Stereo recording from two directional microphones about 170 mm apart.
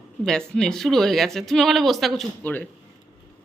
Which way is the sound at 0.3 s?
5° left (ahead or behind).